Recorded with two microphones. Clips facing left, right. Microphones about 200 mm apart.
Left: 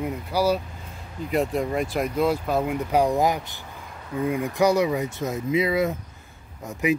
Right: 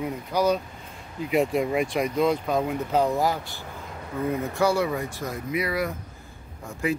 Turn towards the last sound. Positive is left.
turn(degrees=20)  # may be behind; listen again after turning